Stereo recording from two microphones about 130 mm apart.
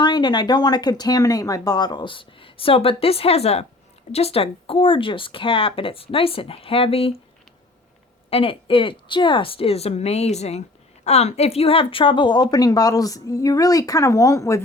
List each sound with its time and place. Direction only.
0.0 s speech: 35° left (ahead or behind)
8.3 s a woman's voice: 45° left (ahead or behind); by 14.6 s 25° left (ahead or behind)